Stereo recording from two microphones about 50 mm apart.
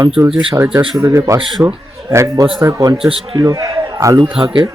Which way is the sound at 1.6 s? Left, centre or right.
Right.